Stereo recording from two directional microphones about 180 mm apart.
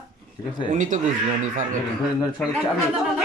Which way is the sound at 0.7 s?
45° right (ahead or behind).